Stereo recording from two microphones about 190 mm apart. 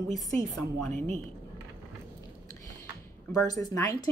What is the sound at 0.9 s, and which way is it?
Speech, 35° right (ahead or behind).